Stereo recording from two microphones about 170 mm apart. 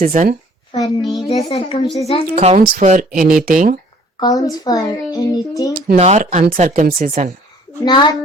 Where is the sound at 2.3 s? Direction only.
35° right (ahead or behind).